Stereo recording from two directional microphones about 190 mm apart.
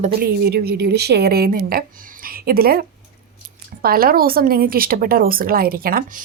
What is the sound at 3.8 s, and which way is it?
A woman's voice, 50° right (ahead or behind).